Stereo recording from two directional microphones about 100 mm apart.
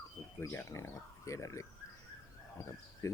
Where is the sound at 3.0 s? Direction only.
30° left (ahead or behind).